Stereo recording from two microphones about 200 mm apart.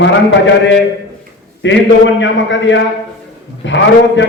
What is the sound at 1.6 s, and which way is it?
A man's voice, 65° left (ahead or behind).